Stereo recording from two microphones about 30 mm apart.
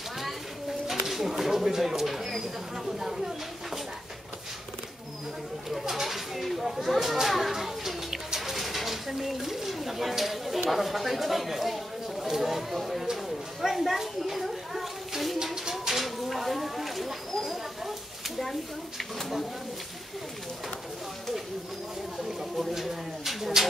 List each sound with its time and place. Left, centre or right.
0.8 s a sound: centre
1.4 s speech: centre
5.7 s a sound: centre
10.7 s speech: centre
15.4 s bird: centre
18.4 s speech: centre
22.6 s speech: centre